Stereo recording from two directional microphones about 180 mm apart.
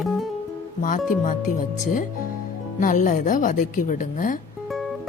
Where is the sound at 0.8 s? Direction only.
50° left (ahead or behind).